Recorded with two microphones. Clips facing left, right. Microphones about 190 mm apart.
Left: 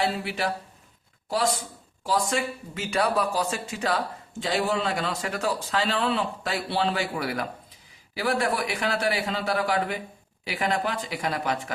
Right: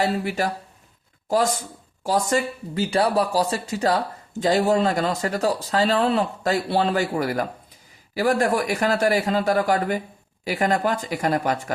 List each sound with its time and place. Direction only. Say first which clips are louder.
0.3 s a man's voice: right 4 dB; 45° right (ahead or behind)
2.0 s a man's voice: right 4 dB; 35° right (ahead or behind)